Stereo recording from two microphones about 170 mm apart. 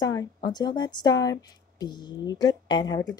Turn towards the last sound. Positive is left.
turn(degrees=20)  # may be behind; listen again after turning